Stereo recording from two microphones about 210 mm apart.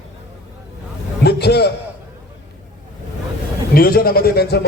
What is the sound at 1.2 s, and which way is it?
Speech, 50° left (ahead or behind).